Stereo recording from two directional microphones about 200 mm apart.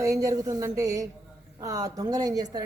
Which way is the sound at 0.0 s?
15° right (ahead or behind).